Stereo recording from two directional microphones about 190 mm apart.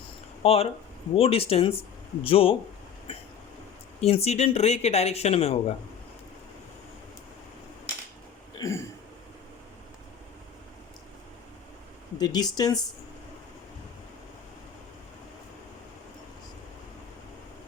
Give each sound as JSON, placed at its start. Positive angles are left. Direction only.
{"t": 0.4, "sound": "speech", "side_deg": 30}
{"t": 4.0, "sound": "speech", "side_deg": 35}
{"t": 8.5, "sound": "a sound", "side_deg": 15}
{"t": 12.1, "sound": "speech", "side_deg": 20}